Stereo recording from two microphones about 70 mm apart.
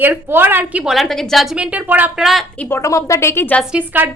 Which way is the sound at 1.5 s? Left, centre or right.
Centre.